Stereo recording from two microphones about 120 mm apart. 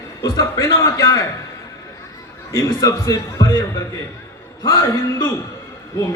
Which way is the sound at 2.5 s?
25° left (ahead or behind).